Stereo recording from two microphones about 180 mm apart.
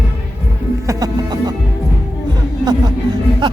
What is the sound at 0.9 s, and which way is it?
Music, 20° right (ahead or behind).